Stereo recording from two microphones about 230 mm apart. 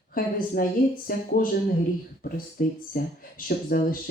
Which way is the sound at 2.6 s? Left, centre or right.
Left.